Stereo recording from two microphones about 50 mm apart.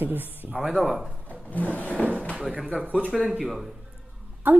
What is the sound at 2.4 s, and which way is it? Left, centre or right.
Speech, centre.